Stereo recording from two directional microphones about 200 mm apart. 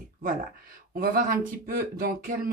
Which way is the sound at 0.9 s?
45° right (ahead or behind).